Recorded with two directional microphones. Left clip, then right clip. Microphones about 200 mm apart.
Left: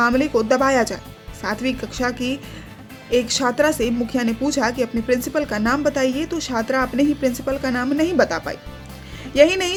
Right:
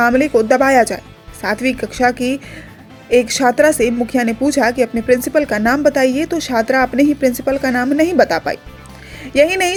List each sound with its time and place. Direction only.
0.0 s a woman's voice: 15° right (ahead or behind)